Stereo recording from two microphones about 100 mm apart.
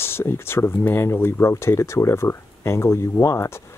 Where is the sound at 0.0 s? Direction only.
25° left (ahead or behind).